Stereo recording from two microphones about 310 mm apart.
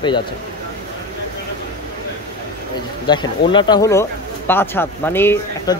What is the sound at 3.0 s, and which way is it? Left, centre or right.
Speech, centre.